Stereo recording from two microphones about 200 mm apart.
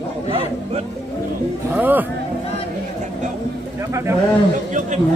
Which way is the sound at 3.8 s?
15° right (ahead or behind).